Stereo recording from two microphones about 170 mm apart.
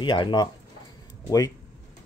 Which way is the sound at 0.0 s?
30° left (ahead or behind).